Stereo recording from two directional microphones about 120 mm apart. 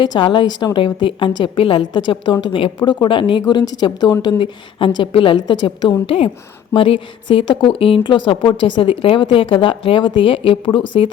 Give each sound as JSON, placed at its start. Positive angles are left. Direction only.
{"t": 0.0, "sound": "a woman's voice", "side_deg": 40}